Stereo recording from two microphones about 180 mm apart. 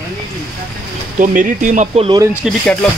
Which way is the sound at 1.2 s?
45° right (ahead or behind).